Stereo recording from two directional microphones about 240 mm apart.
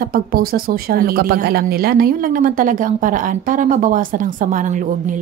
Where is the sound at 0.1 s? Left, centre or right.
Right.